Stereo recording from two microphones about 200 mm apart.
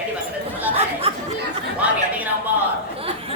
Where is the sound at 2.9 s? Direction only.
30° right (ahead or behind).